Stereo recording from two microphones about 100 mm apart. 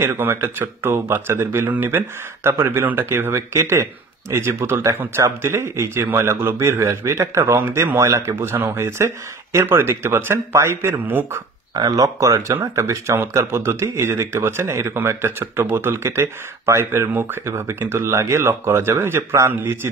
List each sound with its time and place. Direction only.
0.0 s speech: 25° right (ahead or behind)
11.7 s speech: 40° right (ahead or behind); by 19.9 s 25° right (ahead or behind)